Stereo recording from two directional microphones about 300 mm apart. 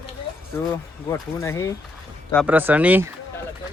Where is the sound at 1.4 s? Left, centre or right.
Centre.